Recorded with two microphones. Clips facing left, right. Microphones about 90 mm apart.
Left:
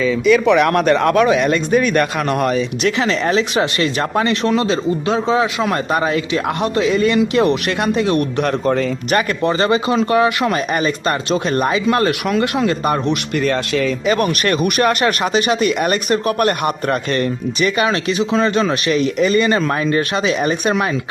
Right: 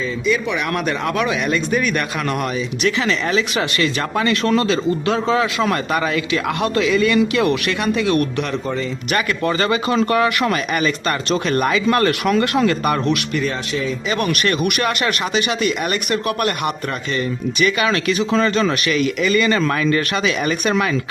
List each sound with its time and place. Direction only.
0.0 s speech: 65° left (ahead or behind); by 8.2 s 35° left (ahead or behind)
8.4 s speech: 50° left (ahead or behind)
9.4 s speech: 25° left (ahead or behind)
10.5 s speech: 35° left (ahead or behind)
11.3 s speech: 20° left (ahead or behind)
12.2 s speech: 15° left (ahead or behind)
13.3 s speech: 50° left (ahead or behind)
17.6 s speech: 35° left (ahead or behind)
18.1 s speech: 20° left (ahead or behind)
18.9 s speech: 35° left (ahead or behind)